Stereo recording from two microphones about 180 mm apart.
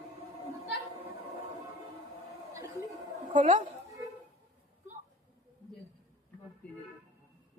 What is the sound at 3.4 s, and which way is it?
Speech, 45° right (ahead or behind).